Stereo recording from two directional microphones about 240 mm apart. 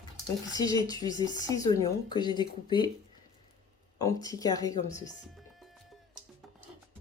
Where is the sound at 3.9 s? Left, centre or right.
Centre.